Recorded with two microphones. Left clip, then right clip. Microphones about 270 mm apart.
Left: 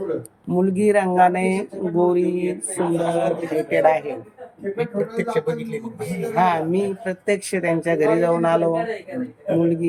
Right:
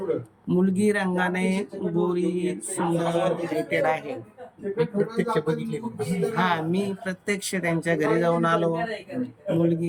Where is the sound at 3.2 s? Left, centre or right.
Centre.